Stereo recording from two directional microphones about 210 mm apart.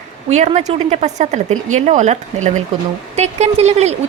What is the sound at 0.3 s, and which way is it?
Speech, 35° right (ahead or behind).